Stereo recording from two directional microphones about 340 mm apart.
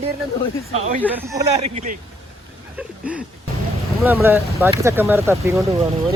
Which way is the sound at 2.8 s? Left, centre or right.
Centre.